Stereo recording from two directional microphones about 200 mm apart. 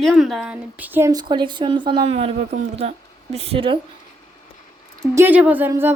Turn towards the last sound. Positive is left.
turn(degrees=-10)  # may be behind; listen again after turning